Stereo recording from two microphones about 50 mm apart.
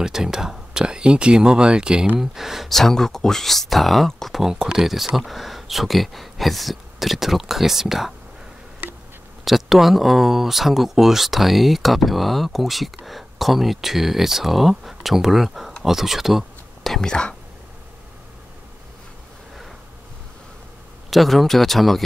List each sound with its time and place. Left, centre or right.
0.0 s speech: centre
2.1 s speech: centre
2.7 s speech: centre
9.4 s speech: centre
16.8 s speech: centre
21.1 s speech: centre